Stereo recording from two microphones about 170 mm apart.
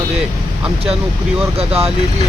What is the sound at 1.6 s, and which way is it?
Speech, 35° right (ahead or behind).